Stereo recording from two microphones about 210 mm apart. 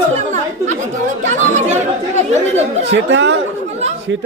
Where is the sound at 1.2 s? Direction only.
35° right (ahead or behind).